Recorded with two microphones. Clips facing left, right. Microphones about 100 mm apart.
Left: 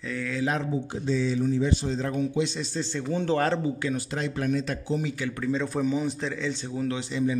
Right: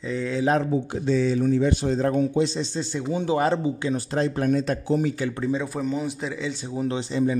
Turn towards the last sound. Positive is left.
turn(degrees=-35)  # may be behind; listen again after turning